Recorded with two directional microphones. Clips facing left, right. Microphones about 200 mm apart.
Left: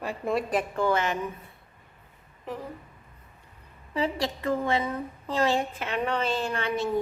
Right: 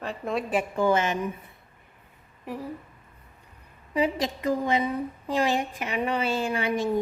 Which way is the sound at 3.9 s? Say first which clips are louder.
Right 2 dB; 15° right (ahead or behind).